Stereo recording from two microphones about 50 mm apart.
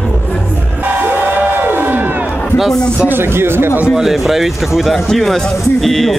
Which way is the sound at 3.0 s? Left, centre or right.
Right.